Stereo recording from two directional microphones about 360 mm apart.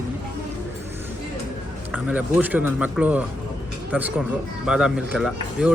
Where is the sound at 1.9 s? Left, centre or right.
Centre.